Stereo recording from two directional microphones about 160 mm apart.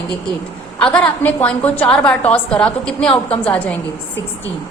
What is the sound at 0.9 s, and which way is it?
A woman's voice, 10° left (ahead or behind).